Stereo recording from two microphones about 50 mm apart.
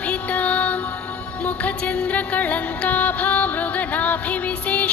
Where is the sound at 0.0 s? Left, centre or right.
Left.